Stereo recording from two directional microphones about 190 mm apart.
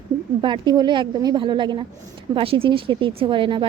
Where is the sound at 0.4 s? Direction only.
25° right (ahead or behind).